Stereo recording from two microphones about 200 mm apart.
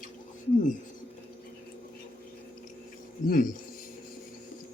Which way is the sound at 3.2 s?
40° left (ahead or behind).